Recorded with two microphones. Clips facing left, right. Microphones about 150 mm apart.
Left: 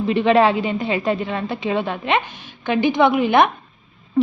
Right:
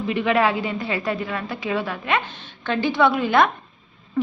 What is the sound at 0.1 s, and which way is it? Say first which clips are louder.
A woman's voice: left 5 dB; 30° left (ahead or behind).